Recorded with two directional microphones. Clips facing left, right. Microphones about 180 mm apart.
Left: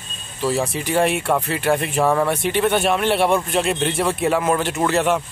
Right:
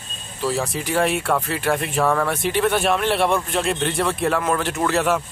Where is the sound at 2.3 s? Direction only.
Centre (ahead or behind).